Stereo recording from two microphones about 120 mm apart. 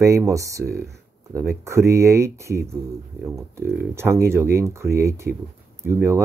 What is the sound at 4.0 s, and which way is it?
Speech, 20° right (ahead or behind).